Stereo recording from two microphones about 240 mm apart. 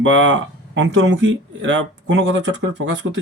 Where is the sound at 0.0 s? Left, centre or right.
Right.